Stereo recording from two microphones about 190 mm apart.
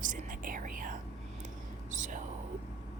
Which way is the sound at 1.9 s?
40° right (ahead or behind).